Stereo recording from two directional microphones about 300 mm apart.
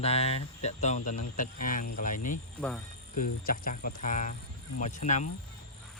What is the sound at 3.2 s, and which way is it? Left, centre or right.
Speech, left.